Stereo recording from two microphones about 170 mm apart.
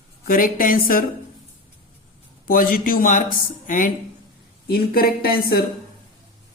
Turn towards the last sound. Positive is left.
turn(degrees=65)  # may be behind; listen again after turning